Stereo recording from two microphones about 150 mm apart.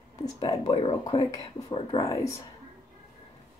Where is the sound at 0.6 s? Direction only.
40° left (ahead or behind).